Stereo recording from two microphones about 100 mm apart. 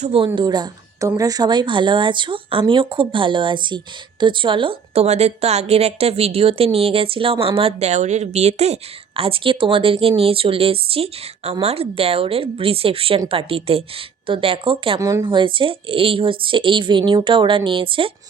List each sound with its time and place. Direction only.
0.3 s speech: 45° right (ahead or behind)
0.9 s a woman's voice: 35° right (ahead or behind); by 14.9 s 60° right (ahead or behind)
14.9 s speech: 35° right (ahead or behind)
15.2 s a woman's voice: 55° right (ahead or behind)